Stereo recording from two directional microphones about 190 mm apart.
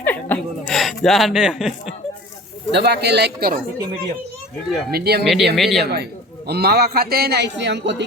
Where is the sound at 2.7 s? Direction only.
60° right (ahead or behind).